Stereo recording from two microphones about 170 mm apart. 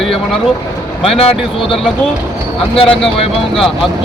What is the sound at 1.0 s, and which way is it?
Speech, 35° left (ahead or behind).